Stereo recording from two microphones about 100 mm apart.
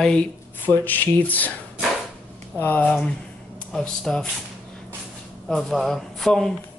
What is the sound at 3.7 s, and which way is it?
Speech, 5° left (ahead or behind).